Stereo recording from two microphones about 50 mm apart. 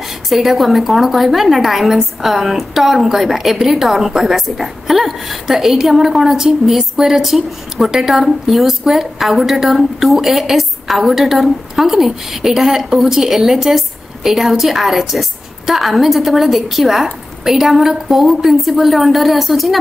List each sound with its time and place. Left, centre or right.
0.3 s a woman's voice: centre